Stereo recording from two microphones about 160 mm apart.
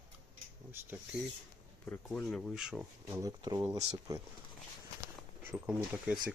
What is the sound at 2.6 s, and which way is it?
Speech, 5° right (ahead or behind).